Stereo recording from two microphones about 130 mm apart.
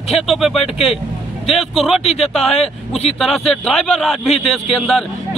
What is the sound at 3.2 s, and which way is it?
A man's voice, centre (ahead or behind).